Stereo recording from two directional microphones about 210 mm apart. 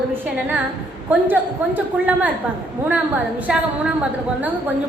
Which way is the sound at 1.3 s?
10° right (ahead or behind).